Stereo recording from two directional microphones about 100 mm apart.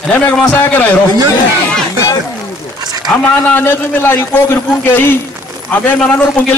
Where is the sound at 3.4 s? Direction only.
20° left (ahead or behind).